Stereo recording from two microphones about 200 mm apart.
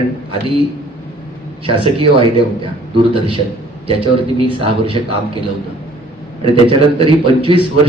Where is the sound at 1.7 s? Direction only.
25° right (ahead or behind).